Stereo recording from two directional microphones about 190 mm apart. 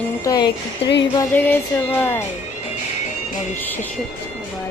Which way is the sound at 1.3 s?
10° left (ahead or behind).